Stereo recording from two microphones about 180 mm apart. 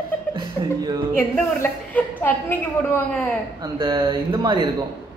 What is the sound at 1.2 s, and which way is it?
A woman's voice, 10° left (ahead or behind).